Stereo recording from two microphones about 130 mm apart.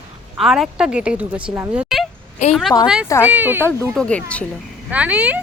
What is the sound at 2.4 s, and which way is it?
Speech, 60° left (ahead or behind).